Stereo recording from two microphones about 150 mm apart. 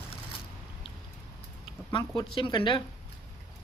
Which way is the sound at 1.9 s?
30° left (ahead or behind).